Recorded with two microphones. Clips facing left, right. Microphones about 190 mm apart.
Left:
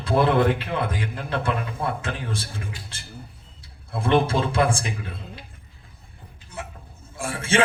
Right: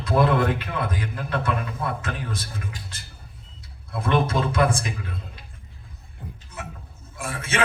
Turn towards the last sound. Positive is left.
turn(degrees=30)  # may be behind; listen again after turning